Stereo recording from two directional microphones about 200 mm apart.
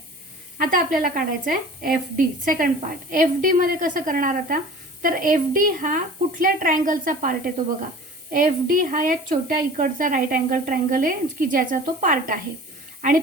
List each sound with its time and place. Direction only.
0.6 s a woman's voice: 45° right (ahead or behind)